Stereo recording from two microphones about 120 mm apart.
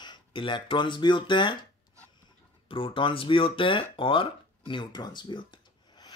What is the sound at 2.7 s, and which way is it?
Speech, 45° left (ahead or behind).